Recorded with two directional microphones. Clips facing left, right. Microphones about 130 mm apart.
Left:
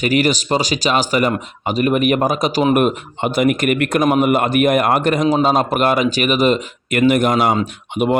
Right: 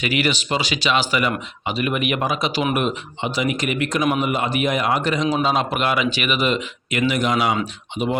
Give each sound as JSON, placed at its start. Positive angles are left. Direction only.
{"t": 0.0, "sound": "speech", "side_deg": 40}